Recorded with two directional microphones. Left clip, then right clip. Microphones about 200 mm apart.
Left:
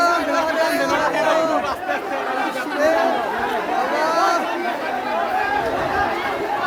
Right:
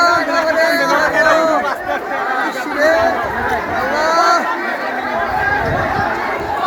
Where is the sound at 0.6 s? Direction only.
30° right (ahead or behind).